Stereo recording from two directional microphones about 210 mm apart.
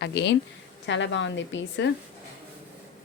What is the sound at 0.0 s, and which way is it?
A woman's voice, 55° left (ahead or behind).